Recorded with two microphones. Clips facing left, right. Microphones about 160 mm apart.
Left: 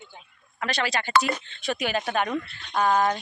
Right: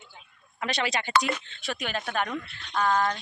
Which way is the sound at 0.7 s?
20° right (ahead or behind).